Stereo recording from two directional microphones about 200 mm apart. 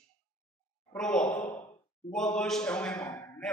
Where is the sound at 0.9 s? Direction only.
5° left (ahead or behind).